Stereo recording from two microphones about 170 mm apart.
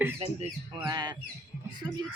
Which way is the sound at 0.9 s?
25° right (ahead or behind).